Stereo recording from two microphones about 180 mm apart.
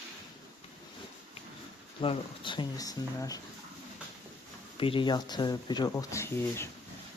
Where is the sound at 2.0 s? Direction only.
30° left (ahead or behind).